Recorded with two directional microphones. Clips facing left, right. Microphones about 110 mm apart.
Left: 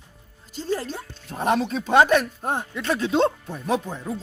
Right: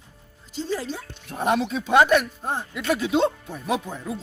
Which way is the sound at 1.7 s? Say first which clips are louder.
Even; 35° left (ahead or behind).